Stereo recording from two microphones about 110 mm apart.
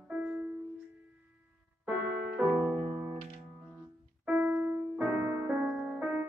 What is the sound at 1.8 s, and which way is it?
Music, 10° right (ahead or behind).